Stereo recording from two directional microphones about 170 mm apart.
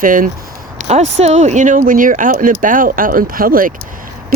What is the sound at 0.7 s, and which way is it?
Speech, 40° right (ahead or behind).